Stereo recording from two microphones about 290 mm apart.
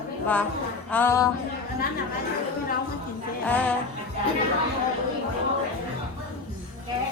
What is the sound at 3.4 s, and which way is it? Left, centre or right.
Speech, centre.